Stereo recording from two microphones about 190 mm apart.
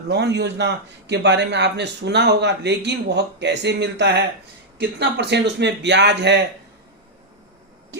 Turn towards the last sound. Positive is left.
turn(degrees=-65)  # may be behind; listen again after turning